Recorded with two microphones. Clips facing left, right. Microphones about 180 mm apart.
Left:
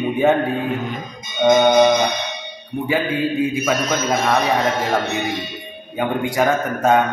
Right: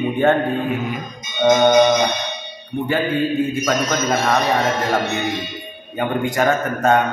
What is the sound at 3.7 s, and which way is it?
Speech, centre (ahead or behind).